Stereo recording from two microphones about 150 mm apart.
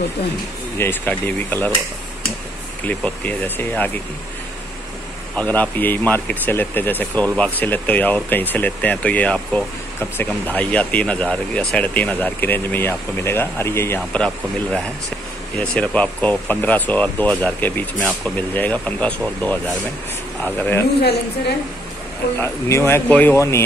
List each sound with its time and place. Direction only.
0.7 s speech: 15° left (ahead or behind)
2.9 s speech: 10° left (ahead or behind)
5.3 s speech: 10° left (ahead or behind)
22.4 s speech: 15° left (ahead or behind)